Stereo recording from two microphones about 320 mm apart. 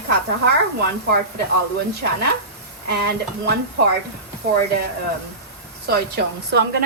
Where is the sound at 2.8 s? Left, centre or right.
Right.